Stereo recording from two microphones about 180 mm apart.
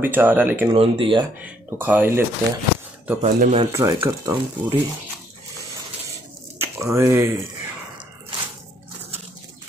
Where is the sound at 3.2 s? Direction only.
40° right (ahead or behind).